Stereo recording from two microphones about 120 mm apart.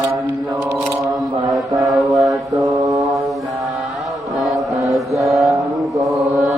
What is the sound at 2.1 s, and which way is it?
Mantra, 30° right (ahead or behind).